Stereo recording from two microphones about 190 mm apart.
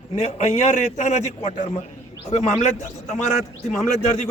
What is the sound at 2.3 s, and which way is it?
Speech, 35° left (ahead or behind).